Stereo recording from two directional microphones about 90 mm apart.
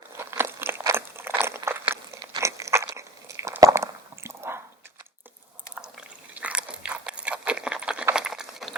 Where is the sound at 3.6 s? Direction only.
35° right (ahead or behind).